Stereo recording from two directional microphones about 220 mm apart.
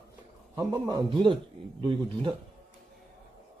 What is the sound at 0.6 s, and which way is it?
A man's voice, 15° right (ahead or behind).